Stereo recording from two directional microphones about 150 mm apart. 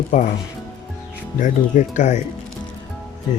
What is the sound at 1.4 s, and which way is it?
Speech, 55° left (ahead or behind).